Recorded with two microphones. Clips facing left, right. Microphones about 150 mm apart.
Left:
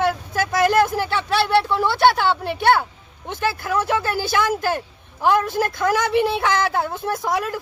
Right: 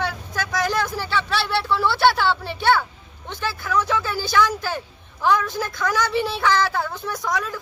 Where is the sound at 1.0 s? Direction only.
50° left (ahead or behind).